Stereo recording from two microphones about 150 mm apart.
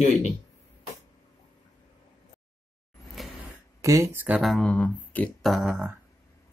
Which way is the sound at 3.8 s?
20° right (ahead or behind).